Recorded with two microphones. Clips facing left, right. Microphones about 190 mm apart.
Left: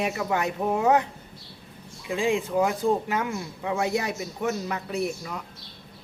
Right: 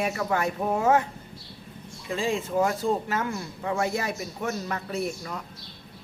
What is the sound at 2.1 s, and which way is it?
Speech, 15° left (ahead or behind).